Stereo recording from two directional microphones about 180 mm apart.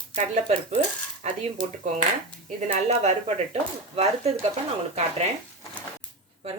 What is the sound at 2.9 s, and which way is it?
Speech, 35° right (ahead or behind).